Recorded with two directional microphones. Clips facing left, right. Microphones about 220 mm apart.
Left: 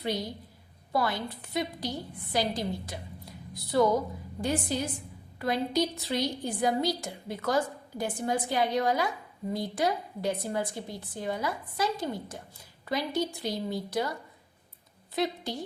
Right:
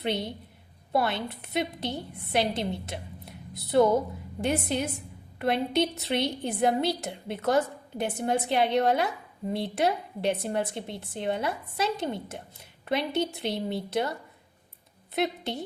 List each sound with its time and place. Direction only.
0.0 s a woman's voice: 25° right (ahead or behind)